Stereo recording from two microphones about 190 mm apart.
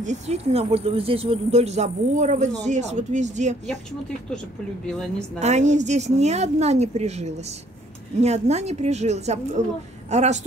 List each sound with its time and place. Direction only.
0.0 s speech: 35° right (ahead or behind)
4.9 s a woman's voice: 5° left (ahead or behind)
5.4 s speech: 40° right (ahead or behind)